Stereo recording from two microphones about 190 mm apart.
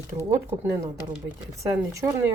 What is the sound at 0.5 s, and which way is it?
Speech, 15° right (ahead or behind).